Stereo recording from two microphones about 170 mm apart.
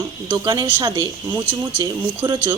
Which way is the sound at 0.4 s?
25° right (ahead or behind).